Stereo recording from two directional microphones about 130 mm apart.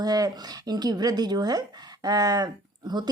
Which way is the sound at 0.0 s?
30° right (ahead or behind).